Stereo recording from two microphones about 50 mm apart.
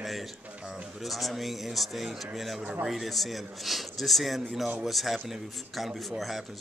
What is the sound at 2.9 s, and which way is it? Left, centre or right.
Speech, centre.